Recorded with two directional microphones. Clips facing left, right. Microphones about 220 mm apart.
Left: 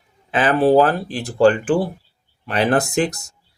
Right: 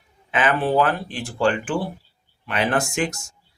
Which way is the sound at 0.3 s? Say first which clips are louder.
Left 6 dB; 35° left (ahead or behind).